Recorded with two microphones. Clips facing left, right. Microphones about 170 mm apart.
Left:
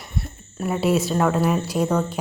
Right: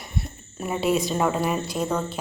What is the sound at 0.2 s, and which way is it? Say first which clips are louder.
A woman's voice: left 3 dB; centre (ahead or behind).